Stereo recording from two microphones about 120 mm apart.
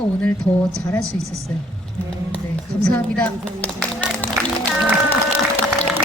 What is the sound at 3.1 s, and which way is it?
Speech, 10° left (ahead or behind).